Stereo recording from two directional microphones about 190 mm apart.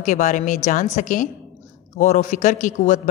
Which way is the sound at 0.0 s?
40° left (ahead or behind).